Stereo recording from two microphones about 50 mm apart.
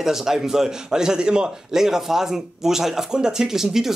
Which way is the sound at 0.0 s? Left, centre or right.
Centre.